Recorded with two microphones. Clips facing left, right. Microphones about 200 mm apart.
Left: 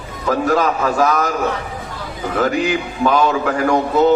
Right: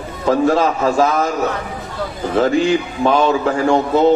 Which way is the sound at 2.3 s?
30° right (ahead or behind).